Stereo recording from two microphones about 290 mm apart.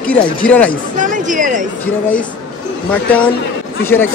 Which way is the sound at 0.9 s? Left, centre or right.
Right.